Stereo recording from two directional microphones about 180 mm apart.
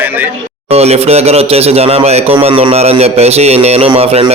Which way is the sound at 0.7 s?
35° right (ahead or behind).